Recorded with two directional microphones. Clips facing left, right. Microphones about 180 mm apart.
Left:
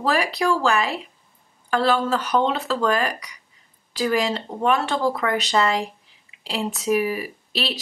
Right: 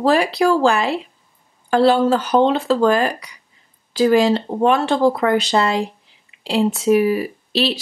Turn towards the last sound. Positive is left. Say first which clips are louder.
# right 8 dB
turn(degrees=-30)  # may be behind; listen again after turning